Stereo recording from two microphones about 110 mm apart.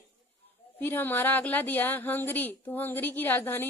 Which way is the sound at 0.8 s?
20° left (ahead or behind).